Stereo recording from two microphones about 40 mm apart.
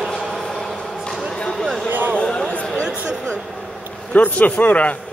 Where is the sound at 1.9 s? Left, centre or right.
Right.